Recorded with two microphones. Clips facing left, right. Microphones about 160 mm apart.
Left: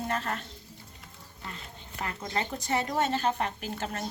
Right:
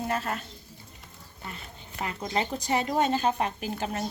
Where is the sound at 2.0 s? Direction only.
15° right (ahead or behind).